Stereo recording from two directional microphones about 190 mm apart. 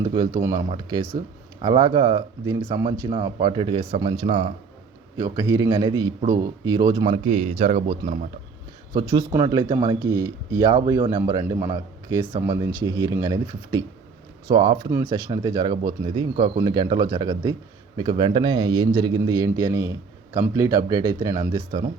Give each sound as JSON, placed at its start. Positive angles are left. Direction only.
{"t": 0.0, "sound": "a man's voice", "side_deg": -25}